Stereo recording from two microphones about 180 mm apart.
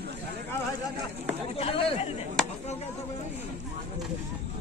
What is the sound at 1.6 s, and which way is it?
Chatter, 30° left (ahead or behind).